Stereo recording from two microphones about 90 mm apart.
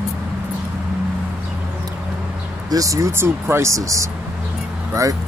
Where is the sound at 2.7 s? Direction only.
40° right (ahead or behind).